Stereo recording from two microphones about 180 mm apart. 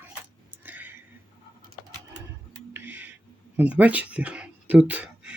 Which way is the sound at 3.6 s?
10° right (ahead or behind).